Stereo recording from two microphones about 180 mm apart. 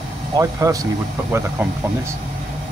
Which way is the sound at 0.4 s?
15° right (ahead or behind).